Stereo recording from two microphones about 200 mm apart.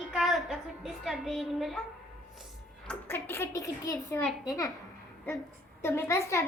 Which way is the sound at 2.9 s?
10° left (ahead or behind).